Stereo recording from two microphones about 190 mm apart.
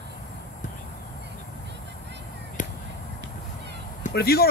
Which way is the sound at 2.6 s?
40° left (ahead or behind).